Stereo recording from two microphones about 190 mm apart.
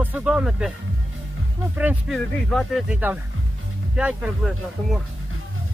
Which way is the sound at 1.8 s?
10° right (ahead or behind).